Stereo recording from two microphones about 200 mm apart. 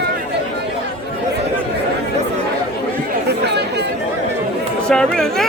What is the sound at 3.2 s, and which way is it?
Chatter, 55° right (ahead or behind).